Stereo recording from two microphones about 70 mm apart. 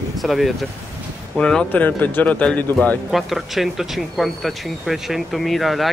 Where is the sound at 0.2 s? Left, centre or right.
Centre.